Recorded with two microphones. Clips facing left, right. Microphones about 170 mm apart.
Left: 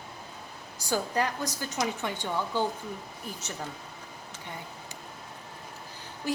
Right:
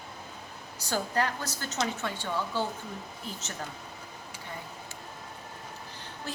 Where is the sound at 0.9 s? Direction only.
15° left (ahead or behind).